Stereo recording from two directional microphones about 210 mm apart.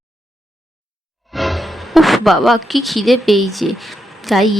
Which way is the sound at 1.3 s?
Centre (ahead or behind).